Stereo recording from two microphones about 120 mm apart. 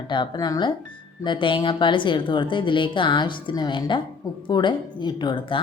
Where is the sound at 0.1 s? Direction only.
40° left (ahead or behind).